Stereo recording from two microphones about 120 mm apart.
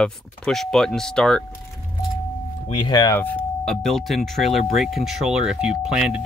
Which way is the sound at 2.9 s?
25° left (ahead or behind).